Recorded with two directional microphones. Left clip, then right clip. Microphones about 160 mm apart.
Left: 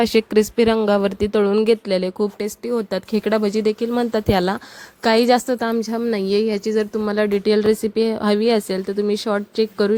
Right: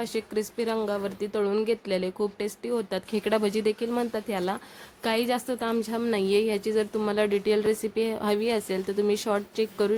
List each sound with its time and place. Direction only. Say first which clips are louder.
0.0 s a woman's voice: left 13 dB; 55° left (ahead or behind)
5.9 s speech: left 5 dB; 35° left (ahead or behind)
8.9 s speech: left 4 dB; 30° left (ahead or behind)